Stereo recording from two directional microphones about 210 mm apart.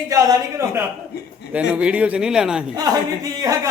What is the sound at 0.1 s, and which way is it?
Speech, 15° right (ahead or behind).